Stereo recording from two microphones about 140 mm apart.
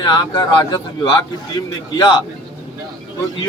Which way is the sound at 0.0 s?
30° left (ahead or behind).